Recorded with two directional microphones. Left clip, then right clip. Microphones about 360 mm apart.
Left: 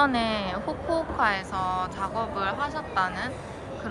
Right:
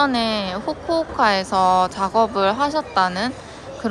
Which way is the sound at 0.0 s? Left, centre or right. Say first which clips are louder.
Right 4 dB; centre.